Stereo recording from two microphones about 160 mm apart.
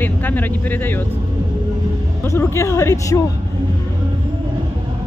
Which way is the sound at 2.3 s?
15° left (ahead or behind).